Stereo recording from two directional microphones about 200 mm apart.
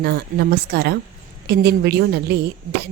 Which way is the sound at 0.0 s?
50° right (ahead or behind).